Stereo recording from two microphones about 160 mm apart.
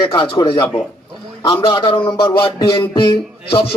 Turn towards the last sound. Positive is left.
turn(degrees=30)  # may be behind; listen again after turning